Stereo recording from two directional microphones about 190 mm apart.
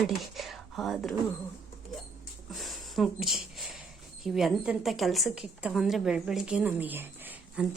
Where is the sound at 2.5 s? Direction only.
Centre (ahead or behind).